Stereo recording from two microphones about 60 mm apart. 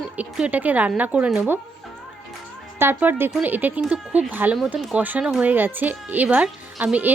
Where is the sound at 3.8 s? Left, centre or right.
Centre.